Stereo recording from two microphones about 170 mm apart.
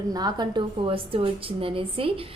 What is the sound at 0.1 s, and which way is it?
A woman's voice, 25° right (ahead or behind).